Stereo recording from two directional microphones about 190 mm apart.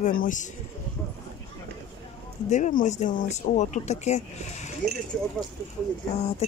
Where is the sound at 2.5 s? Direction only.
40° left (ahead or behind).